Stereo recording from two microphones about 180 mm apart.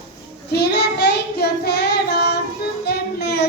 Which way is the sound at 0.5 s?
65° left (ahead or behind).